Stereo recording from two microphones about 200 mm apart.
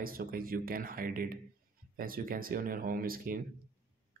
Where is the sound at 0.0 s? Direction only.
45° right (ahead or behind).